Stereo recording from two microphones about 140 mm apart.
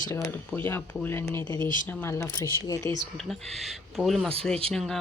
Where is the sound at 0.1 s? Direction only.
15° left (ahead or behind).